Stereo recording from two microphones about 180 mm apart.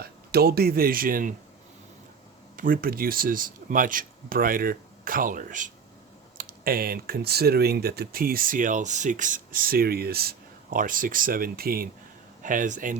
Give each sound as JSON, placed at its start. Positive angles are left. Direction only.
{"t": 0.0, "sound": "speech", "side_deg": -60}
{"t": 2.6, "sound": "speech", "side_deg": -55}